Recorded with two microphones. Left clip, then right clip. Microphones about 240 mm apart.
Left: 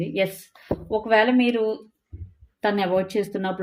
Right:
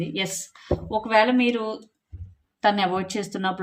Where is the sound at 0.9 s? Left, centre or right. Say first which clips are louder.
Left 1 dB; centre.